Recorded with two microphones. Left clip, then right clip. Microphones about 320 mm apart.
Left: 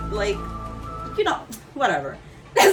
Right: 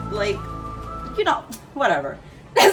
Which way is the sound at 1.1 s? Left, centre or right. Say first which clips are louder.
Right 2 dB; centre.